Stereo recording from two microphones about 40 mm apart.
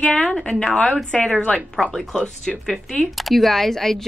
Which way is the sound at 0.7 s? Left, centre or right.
Centre.